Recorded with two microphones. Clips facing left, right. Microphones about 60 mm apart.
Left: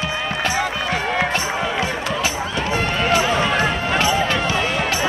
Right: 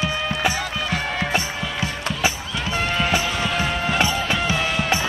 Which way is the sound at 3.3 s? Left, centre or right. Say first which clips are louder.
Left 5 dB; left.